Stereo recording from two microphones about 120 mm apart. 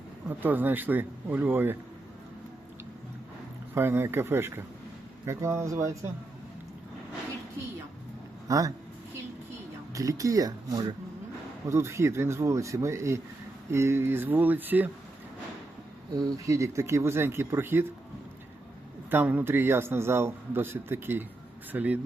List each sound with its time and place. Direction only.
0.3 s speech: 15° right (ahead or behind)
3.8 s a man's voice: 20° right (ahead or behind)
8.4 s speech: 30° right (ahead or behind)
9.9 s a man's voice: 30° right (ahead or behind)
16.1 s a man's voice: 30° right (ahead or behind)
19.1 s a man's voice: 15° right (ahead or behind)